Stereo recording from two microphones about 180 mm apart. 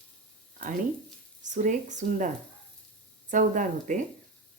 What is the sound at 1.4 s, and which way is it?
Speech, 45° right (ahead or behind).